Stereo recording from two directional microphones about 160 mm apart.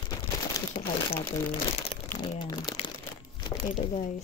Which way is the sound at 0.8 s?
50° left (ahead or behind).